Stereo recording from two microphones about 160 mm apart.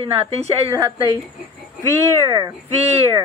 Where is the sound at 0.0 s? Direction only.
40° right (ahead or behind).